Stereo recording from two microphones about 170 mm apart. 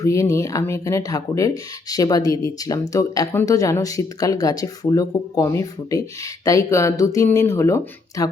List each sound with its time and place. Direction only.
0.0 s speech: 20° left (ahead or behind)